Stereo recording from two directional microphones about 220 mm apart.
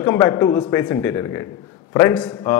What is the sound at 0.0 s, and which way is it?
A man's voice, 10° left (ahead or behind).